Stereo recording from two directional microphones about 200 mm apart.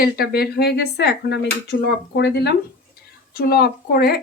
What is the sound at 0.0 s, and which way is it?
Speech, 50° left (ahead or behind).